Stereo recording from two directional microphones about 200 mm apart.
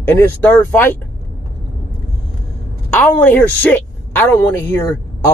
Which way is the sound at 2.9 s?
10° left (ahead or behind).